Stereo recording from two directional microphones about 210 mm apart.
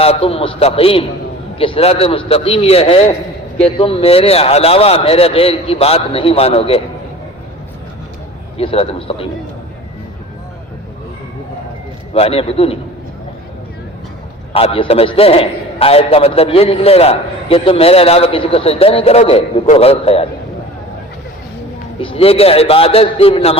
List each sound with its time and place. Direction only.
0.0 s a man's voice: 25° left (ahead or behind)
8.5 s a man's voice: 30° left (ahead or behind)
12.1 s a man's voice: 25° left (ahead or behind)
14.5 s a man's voice: 25° left (ahead or behind)
22.0 s a man's voice: 25° left (ahead or behind)